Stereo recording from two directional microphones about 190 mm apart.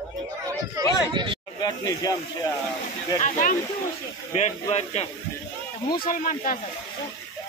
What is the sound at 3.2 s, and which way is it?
Speech, 40° left (ahead or behind).